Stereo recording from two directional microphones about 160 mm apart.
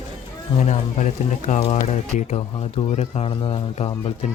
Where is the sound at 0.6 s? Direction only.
50° left (ahead or behind).